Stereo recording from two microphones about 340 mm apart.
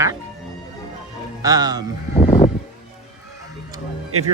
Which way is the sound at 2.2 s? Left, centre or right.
Centre.